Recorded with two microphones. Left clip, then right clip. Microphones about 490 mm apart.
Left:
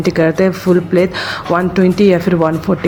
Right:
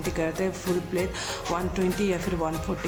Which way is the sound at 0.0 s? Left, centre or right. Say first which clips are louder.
Left 15 dB; right.